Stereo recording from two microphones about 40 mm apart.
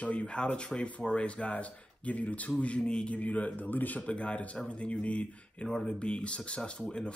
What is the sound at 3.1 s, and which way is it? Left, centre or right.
Speech, left.